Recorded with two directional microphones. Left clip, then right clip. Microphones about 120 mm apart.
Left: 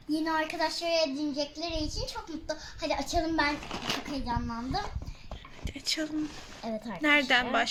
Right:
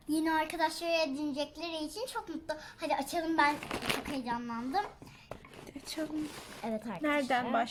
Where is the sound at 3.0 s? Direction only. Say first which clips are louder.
Left 5 dB; 60° right (ahead or behind).